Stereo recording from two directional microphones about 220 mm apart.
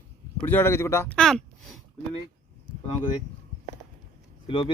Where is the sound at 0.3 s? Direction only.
10° left (ahead or behind).